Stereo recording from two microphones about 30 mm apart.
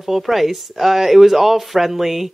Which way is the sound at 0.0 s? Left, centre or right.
Centre.